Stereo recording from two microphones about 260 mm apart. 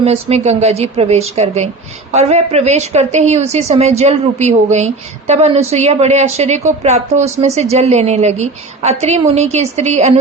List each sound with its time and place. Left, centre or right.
0.0 s a woman's voice: right